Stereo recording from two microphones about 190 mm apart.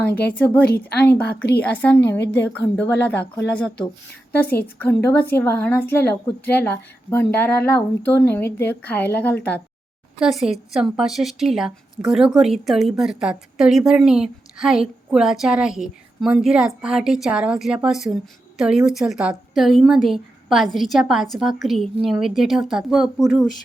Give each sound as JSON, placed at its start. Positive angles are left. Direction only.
{"t": 0.0, "sound": "speech", "side_deg": 10}
{"t": 0.6, "sound": "speech", "side_deg": 55}
{"t": 1.6, "sound": "speech", "side_deg": 10}
{"t": 7.1, "sound": "speech", "side_deg": 10}
{"t": 10.2, "sound": "a woman's voice", "side_deg": 0}